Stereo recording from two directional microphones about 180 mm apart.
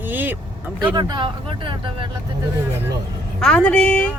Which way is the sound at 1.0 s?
25° right (ahead or behind).